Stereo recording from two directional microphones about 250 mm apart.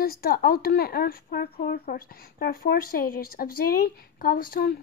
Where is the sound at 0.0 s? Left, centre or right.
Left.